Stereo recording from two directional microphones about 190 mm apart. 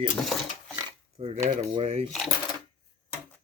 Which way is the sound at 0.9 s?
25° right (ahead or behind).